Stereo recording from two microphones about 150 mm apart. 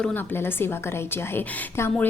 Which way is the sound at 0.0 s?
10° left (ahead or behind).